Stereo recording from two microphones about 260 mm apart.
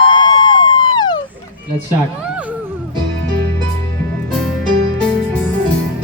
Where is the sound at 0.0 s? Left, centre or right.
Centre.